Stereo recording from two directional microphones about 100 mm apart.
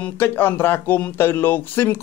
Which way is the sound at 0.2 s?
20° left (ahead or behind).